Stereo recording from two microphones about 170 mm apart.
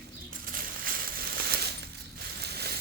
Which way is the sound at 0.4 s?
60° right (ahead or behind).